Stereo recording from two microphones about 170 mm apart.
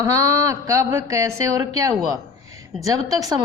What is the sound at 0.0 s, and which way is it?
A woman's voice, 20° right (ahead or behind).